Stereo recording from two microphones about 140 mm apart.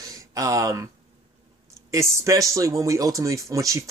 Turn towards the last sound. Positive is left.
turn(degrees=-20)  # may be behind; listen again after turning